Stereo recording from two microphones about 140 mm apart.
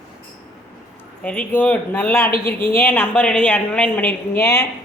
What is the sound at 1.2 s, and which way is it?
A woman's voice, 10° left (ahead or behind).